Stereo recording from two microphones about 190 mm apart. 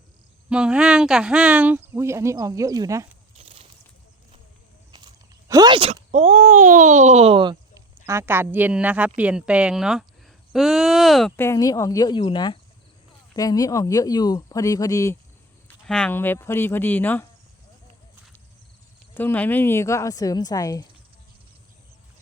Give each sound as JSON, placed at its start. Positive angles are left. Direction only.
{"t": 0.5, "sound": "speech", "side_deg": -5}
{"t": 3.3, "sound": "a sound", "side_deg": -30}
{"t": 4.9, "sound": "speech", "side_deg": -20}
{"t": 8.0, "sound": "speech", "side_deg": -15}
{"t": 11.3, "sound": "speech", "side_deg": 15}
{"t": 15.9, "sound": "speech", "side_deg": 5}
{"t": 19.1, "sound": "speech", "side_deg": 10}